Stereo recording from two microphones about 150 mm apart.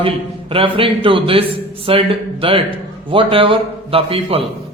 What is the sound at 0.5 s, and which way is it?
A man's voice, 35° right (ahead or behind).